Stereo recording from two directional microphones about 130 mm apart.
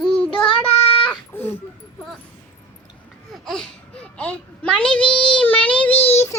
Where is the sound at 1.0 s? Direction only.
15° left (ahead or behind).